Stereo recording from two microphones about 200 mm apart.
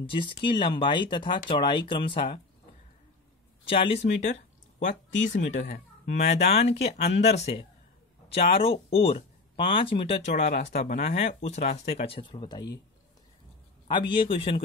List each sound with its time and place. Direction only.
0.1 s speech: 25° left (ahead or behind)
3.6 s speech: 25° left (ahead or behind)
13.8 s speech: 25° left (ahead or behind)